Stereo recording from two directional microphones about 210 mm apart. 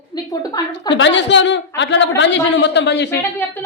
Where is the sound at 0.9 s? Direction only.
60° left (ahead or behind).